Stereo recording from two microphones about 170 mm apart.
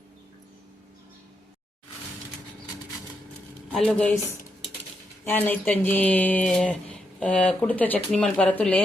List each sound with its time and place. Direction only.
3.7 s speech: 5° left (ahead or behind)
5.2 s speech: 10° left (ahead or behind)